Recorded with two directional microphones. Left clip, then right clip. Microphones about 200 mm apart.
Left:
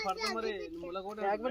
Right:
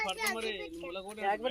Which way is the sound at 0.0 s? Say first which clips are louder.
Right 1 dB; 45° left (ahead or behind).